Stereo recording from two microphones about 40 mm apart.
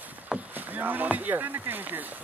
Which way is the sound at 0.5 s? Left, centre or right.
Right.